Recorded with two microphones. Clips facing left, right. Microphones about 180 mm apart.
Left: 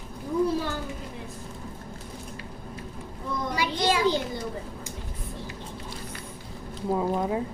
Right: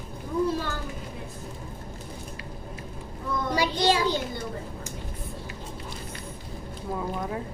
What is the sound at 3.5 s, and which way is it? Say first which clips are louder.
Child singing: right 2 dB; 30° right (ahead or behind).